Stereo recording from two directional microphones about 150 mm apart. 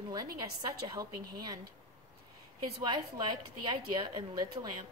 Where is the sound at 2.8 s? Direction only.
30° right (ahead or behind).